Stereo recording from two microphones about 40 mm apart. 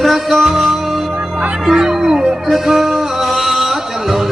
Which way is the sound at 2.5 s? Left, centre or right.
Centre.